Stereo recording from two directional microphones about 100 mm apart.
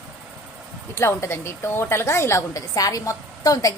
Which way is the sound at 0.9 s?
25° left (ahead or behind).